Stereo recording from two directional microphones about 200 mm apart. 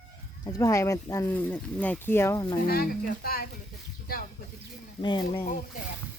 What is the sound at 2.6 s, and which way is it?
Speech, 45° left (ahead or behind).